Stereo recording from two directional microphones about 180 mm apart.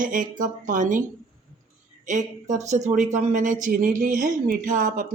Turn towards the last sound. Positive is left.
turn(degrees=-45)  # may be behind; listen again after turning